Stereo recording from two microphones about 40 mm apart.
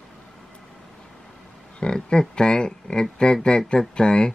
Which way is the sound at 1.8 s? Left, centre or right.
Centre.